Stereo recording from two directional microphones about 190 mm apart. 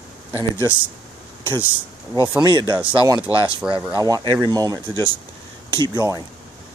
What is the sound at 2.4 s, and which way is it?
Speech, 20° right (ahead or behind).